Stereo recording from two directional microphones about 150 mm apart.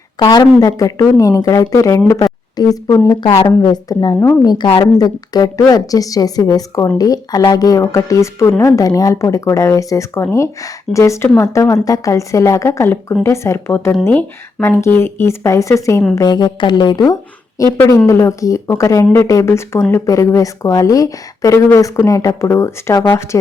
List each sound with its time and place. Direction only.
0.2 s a woman's voice: 30° left (ahead or behind)